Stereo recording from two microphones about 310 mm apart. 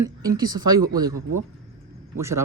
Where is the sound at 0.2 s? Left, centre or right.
Centre.